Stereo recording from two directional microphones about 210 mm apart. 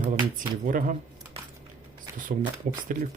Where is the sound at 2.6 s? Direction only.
35° right (ahead or behind).